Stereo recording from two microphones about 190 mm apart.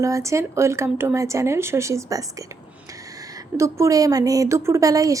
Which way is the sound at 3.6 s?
15° right (ahead or behind).